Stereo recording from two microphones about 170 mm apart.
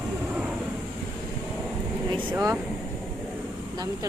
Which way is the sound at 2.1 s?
25° right (ahead or behind).